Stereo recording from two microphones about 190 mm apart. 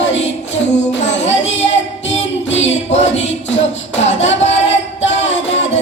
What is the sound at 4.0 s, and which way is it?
Music, 35° left (ahead or behind).